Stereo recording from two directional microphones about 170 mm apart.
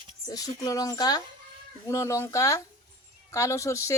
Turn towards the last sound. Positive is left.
turn(degrees=15)  # may be behind; listen again after turning